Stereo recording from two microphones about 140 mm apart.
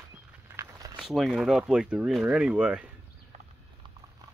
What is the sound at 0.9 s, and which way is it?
Speech, centre (ahead or behind).